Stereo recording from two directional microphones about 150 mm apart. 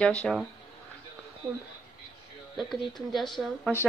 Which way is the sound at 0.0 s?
5° left (ahead or behind).